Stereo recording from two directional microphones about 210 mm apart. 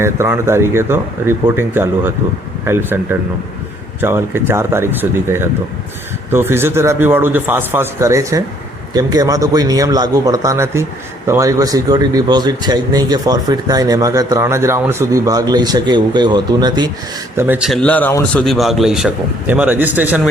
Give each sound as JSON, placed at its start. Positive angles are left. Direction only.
{"t": 0.0, "sound": "a man's voice", "side_deg": -10}